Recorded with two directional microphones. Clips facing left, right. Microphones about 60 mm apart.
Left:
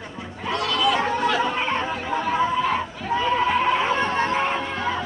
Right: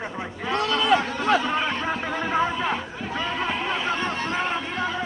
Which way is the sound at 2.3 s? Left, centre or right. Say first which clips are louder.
Left 2 dB; right.